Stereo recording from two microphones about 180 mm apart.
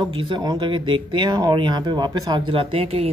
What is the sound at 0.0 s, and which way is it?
Speech, 25° right (ahead or behind).